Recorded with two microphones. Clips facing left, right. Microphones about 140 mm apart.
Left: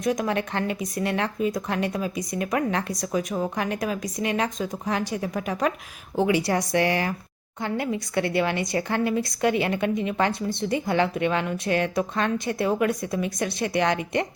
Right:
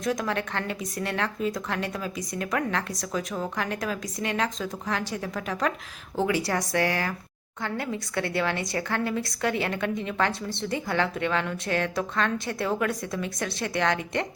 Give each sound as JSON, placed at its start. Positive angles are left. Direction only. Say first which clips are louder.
{"t": 0.0, "sound": "a woman's voice", "louder": "left 3 dB", "side_deg": 15}